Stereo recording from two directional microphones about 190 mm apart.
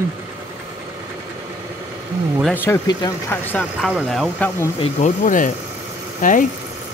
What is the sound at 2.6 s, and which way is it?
Speech, 20° left (ahead or behind).